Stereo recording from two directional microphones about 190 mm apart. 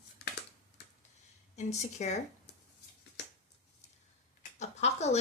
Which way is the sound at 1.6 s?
35° left (ahead or behind).